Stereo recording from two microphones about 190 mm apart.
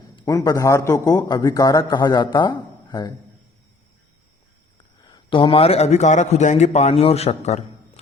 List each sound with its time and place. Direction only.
0.2 s a man's voice: 20° left (ahead or behind)
5.0 s a man's voice: 25° left (ahead or behind)